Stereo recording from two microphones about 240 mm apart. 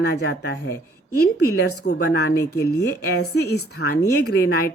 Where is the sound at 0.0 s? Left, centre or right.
Left.